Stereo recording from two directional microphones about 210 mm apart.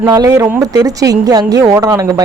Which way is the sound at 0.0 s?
15° right (ahead or behind).